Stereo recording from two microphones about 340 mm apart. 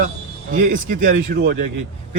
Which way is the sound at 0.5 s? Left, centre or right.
Right.